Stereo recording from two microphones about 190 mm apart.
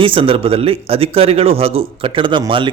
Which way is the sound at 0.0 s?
30° right (ahead or behind).